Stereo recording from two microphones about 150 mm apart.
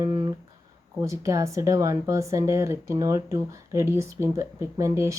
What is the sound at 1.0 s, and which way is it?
Speech, 20° right (ahead or behind).